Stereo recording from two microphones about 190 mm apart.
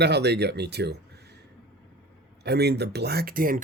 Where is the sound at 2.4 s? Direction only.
60° right (ahead or behind).